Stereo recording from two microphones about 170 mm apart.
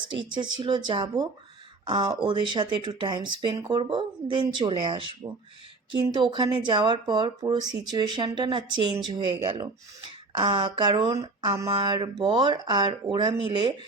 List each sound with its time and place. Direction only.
0.0 s speech: 25° right (ahead or behind)